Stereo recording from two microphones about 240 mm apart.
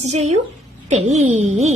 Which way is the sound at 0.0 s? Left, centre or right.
Right.